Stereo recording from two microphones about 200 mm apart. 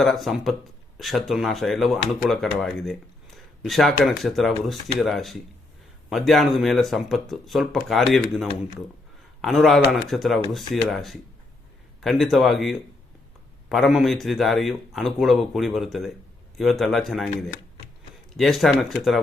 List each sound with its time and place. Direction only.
0.0 s speech: centre (ahead or behind)
18.3 s speech: centre (ahead or behind)